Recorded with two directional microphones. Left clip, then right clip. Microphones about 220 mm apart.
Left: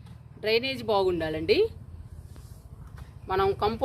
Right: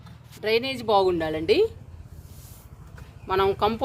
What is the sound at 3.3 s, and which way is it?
Speech, 20° right (ahead or behind).